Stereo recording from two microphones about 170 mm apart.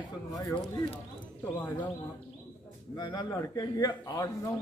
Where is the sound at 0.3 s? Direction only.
20° left (ahead or behind).